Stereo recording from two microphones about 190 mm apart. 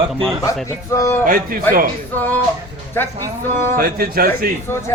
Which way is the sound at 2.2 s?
10° left (ahead or behind).